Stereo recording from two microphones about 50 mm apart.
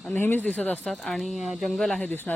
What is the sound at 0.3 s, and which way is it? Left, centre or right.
Speech, left.